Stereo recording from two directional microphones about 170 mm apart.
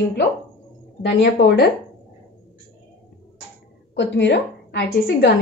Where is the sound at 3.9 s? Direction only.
90° left.